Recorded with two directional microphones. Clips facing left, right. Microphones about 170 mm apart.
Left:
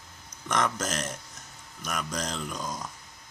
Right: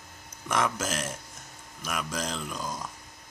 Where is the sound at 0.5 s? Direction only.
5° right (ahead or behind).